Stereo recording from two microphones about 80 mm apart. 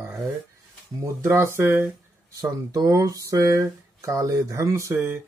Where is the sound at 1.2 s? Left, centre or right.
Right.